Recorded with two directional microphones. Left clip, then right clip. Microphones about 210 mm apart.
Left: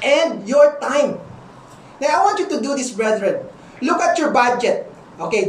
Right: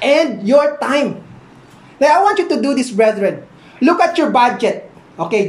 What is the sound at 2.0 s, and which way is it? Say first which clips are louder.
A woman's voice: right 5 dB; 20° right (ahead or behind).